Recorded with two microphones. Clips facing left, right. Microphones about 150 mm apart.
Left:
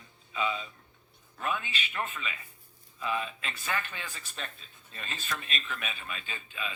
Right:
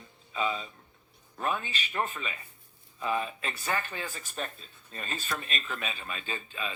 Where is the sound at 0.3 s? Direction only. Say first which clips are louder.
Right 1 dB; 35° right (ahead or behind).